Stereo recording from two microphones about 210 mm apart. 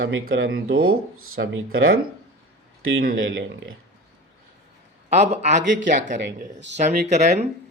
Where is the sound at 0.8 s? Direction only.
85° right.